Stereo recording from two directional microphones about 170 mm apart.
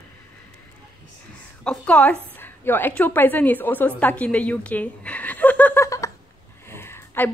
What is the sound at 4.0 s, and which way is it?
Chuckle, 10° left (ahead or behind).